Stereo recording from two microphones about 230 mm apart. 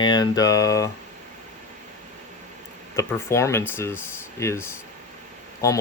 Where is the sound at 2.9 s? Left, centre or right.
Centre.